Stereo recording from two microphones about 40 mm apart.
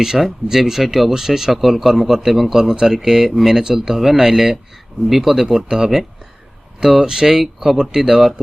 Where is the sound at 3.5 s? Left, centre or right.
Centre.